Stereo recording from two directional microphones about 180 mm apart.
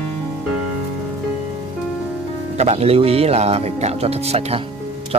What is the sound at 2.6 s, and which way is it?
Speech, 35° right (ahead or behind).